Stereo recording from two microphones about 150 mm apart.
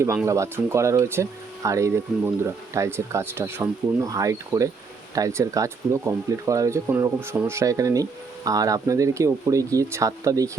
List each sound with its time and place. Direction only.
0.3 s speech: 20° right (ahead or behind)